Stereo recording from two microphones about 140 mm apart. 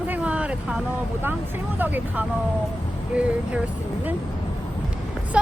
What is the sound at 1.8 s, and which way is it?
Speech, 15° right (ahead or behind).